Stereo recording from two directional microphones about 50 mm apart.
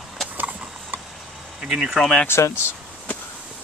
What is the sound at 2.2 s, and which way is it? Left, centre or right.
Speech, left.